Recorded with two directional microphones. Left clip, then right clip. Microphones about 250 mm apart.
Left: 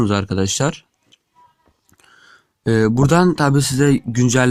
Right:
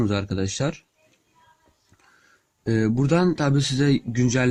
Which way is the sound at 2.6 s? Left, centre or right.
Centre.